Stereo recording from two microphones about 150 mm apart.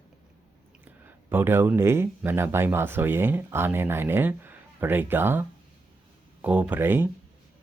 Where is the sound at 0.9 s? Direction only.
15° right (ahead or behind).